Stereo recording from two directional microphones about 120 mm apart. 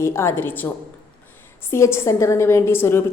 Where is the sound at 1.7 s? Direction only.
20° left (ahead or behind).